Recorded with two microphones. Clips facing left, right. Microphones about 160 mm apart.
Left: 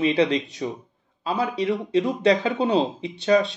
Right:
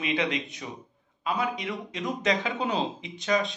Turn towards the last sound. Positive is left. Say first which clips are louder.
# left 7 dB
turn(degrees=35)  # may be behind; listen again after turning